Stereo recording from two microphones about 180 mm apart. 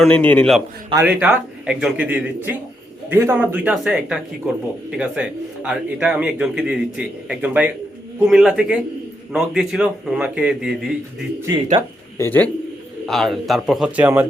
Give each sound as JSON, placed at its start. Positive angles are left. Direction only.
{"t": 0.0, "sound": "a man's voice", "side_deg": 5}
{"t": 0.9, "sound": "a man's voice", "side_deg": -10}
{"t": 11.4, "sound": "speech", "side_deg": -20}
{"t": 12.1, "sound": "speech", "side_deg": 10}
{"t": 13.1, "sound": "a man's voice", "side_deg": 0}